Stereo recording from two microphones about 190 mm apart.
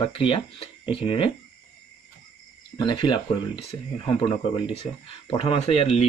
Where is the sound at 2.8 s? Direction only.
25° left (ahead or behind).